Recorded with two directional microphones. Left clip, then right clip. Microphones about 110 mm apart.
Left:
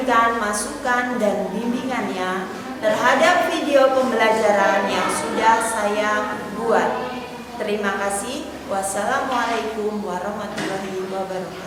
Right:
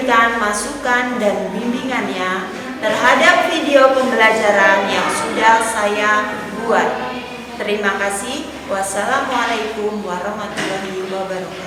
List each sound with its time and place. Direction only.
0.1 s a woman's voice: centre (ahead or behind)
7.7 s a woman's voice: centre (ahead or behind)